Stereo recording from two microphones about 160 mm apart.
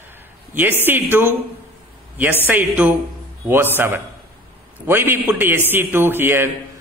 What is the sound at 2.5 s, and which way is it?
Speech, 10° right (ahead or behind).